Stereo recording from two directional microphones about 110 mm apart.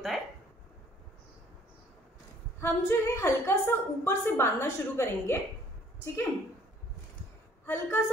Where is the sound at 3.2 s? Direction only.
25° left (ahead or behind).